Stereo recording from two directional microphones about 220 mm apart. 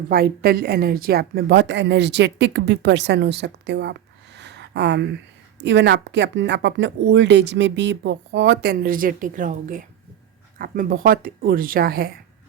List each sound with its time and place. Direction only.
0.1 s speech: 45° right (ahead or behind)
4.4 s a sound: 50° right (ahead or behind)
5.6 s speech: 50° right (ahead or behind)